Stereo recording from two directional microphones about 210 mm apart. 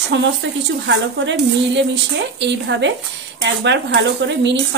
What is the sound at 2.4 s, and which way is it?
Speech, 55° right (ahead or behind).